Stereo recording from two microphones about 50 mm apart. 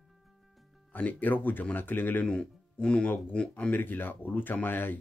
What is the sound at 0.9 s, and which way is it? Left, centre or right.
Speech, left.